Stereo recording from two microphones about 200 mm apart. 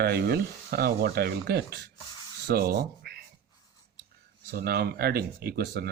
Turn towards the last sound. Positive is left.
turn(degrees=-50)  # may be behind; listen again after turning